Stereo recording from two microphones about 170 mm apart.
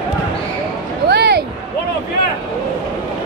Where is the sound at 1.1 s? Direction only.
75° right (ahead or behind).